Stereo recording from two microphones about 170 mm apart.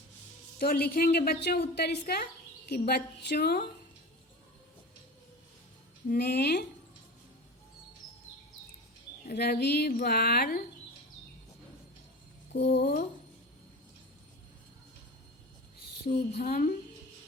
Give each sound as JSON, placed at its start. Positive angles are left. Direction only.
{"t": 0.6, "sound": "a woman's voice", "side_deg": 60}
{"t": 6.1, "sound": "a woman's voice", "side_deg": 70}
{"t": 9.2, "sound": "speech", "side_deg": 70}
{"t": 12.8, "sound": "a woman's voice", "side_deg": 65}
{"t": 16.0, "sound": "speech", "side_deg": 65}